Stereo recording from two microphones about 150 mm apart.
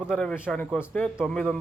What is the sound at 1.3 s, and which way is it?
Speech, 5° left (ahead or behind).